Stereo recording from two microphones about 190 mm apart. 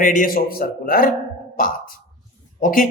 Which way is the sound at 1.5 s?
45° left (ahead or behind).